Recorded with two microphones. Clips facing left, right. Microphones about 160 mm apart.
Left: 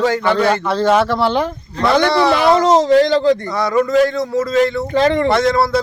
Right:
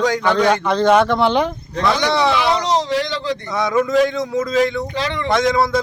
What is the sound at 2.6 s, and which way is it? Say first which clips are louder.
Speech: left 8 dB; 45° left (ahead or behind).